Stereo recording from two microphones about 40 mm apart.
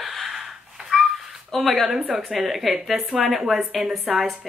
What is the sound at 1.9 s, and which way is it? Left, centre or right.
Speech, centre.